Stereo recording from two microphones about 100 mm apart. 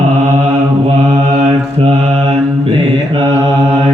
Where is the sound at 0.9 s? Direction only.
90° right; by 3.9 s 65° right (ahead or behind).